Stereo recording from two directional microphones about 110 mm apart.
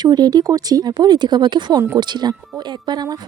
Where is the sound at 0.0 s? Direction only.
40° right (ahead or behind).